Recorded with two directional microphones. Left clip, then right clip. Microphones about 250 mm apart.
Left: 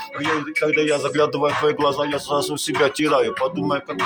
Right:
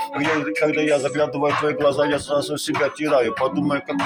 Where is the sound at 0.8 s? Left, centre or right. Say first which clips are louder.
Left 1 dB; centre.